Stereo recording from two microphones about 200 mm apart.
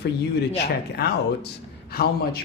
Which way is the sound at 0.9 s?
55° left (ahead or behind).